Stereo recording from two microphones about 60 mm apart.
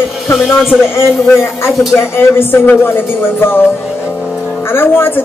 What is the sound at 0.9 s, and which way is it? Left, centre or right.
Speech, left.